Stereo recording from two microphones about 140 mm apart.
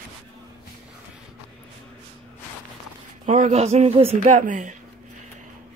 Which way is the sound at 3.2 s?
55° right (ahead or behind).